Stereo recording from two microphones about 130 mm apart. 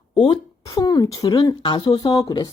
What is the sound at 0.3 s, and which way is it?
Speech, 30° left (ahead or behind).